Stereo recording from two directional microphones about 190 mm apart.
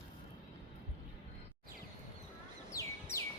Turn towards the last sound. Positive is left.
turn(degrees=15)  # may be behind; listen again after turning